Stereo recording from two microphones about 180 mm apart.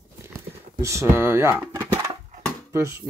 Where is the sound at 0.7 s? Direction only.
15° right (ahead or behind).